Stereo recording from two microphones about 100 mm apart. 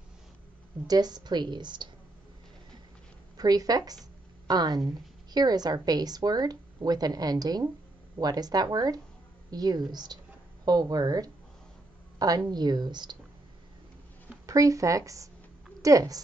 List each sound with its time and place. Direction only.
0.8 s a woman's voice: 40° right (ahead or behind)
3.3 s a woman's voice: 40° right (ahead or behind)
14.4 s a woman's voice: 35° right (ahead or behind)